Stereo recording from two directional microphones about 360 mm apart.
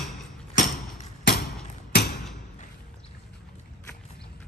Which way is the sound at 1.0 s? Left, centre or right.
Left.